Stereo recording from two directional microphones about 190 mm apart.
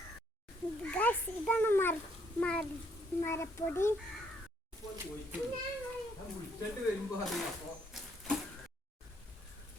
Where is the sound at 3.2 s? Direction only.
15° left (ahead or behind).